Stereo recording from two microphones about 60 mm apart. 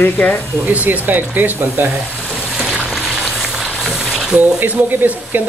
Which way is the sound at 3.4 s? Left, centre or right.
Centre.